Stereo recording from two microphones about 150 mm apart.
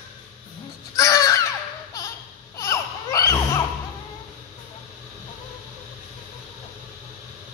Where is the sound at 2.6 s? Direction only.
20° left (ahead or behind).